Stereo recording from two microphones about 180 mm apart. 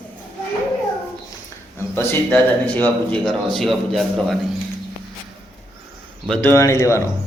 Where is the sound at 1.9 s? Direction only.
10° left (ahead or behind).